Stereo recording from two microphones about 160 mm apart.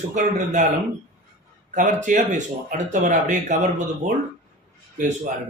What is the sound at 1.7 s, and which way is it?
Speech, 50° right (ahead or behind).